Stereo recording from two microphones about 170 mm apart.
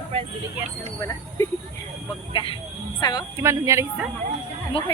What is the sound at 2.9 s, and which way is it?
Speech, 25° left (ahead or behind).